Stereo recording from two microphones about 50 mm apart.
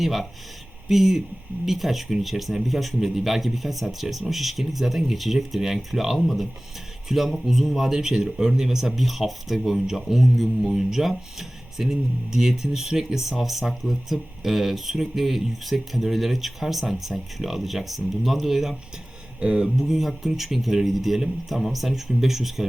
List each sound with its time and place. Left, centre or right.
0.0 s a man's voice: centre
19.4 s speech: centre
19.8 s a man's voice: centre